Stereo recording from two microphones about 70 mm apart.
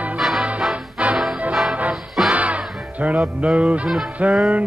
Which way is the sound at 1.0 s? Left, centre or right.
Centre.